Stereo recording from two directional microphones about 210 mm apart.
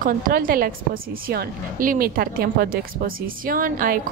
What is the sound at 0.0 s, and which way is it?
A woman's voice, 40° right (ahead or behind).